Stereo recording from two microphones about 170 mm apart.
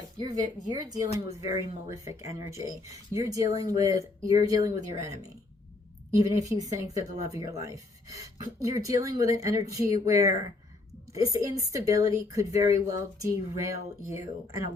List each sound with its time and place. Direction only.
0.2 s speech: 25° right (ahead or behind)